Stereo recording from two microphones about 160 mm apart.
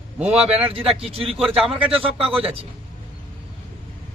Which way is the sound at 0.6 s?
35° right (ahead or behind).